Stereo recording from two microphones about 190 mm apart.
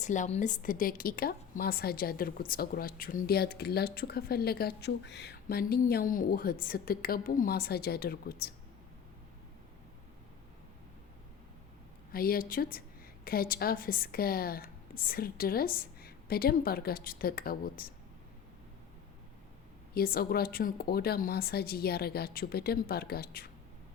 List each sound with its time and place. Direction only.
0.0 s a woman's voice: 40° left (ahead or behind)
12.1 s a woman's voice: 50° left (ahead or behind)
19.9 s a woman's voice: 50° left (ahead or behind)